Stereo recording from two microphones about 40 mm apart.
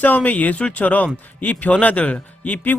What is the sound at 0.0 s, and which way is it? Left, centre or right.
Speech, left.